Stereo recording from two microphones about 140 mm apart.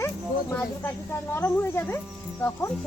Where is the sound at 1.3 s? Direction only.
15° left (ahead or behind).